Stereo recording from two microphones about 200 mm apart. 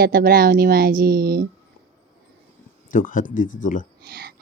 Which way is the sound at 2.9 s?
40° left (ahead or behind).